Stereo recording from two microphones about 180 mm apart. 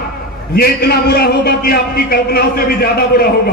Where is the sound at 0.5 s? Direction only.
60° left (ahead or behind).